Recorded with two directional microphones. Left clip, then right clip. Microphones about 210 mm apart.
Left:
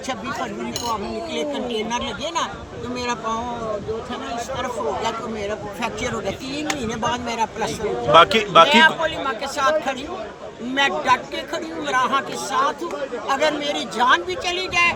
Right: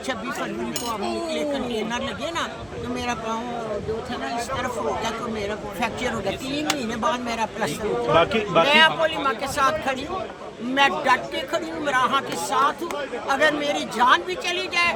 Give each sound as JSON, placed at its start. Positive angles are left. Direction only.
{"t": 1.9, "sound": "speech", "side_deg": 0}
{"t": 4.5, "sound": "speech", "side_deg": -5}
{"t": 8.1, "sound": "speech", "side_deg": 55}
{"t": 8.6, "sound": "speech", "side_deg": -5}